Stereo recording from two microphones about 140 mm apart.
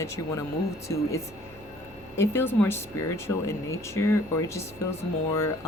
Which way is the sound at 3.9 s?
20° left (ahead or behind).